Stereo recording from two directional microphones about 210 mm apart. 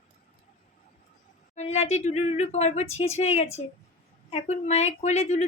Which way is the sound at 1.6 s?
30° left (ahead or behind).